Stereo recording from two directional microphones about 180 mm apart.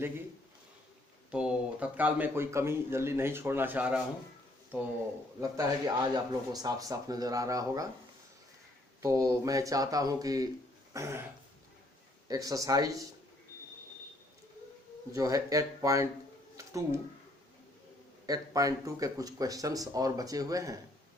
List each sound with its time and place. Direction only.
1.3 s a man's voice: 5° right (ahead or behind)
5.4 s speech: 20° right (ahead or behind)
9.0 s a man's voice: 20° right (ahead or behind)
12.3 s speech: 20° right (ahead or behind)
15.1 s speech: 20° right (ahead or behind)
18.3 s speech: 20° right (ahead or behind)